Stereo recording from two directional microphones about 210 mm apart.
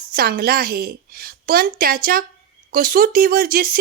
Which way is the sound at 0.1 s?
45° right (ahead or behind).